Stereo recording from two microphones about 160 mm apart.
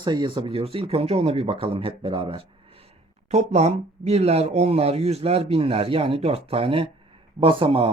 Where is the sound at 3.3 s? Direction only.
45° right (ahead or behind).